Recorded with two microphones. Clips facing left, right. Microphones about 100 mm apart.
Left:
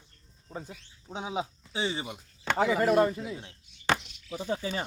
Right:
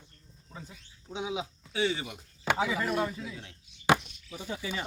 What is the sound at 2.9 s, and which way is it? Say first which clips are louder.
Speech: left 7 dB; 45° left (ahead or behind).